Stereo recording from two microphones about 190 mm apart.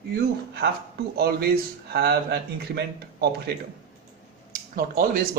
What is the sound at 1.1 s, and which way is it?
Speech, 55° right (ahead or behind).